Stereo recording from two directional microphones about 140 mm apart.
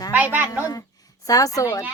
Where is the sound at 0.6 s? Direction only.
25° left (ahead or behind).